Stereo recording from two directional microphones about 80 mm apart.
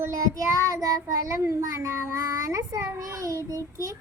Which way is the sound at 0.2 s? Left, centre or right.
Right.